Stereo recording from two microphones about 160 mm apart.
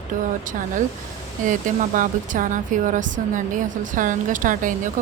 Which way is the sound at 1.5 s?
55° right (ahead or behind).